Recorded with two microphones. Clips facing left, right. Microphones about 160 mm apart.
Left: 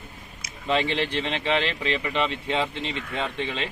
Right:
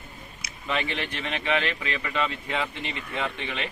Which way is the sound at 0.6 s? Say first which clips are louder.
Left 5 dB; 30° left (ahead or behind).